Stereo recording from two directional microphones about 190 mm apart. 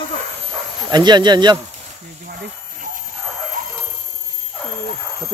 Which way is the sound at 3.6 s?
45° right (ahead or behind).